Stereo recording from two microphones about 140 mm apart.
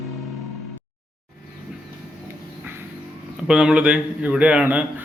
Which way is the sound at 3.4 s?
5° right (ahead or behind).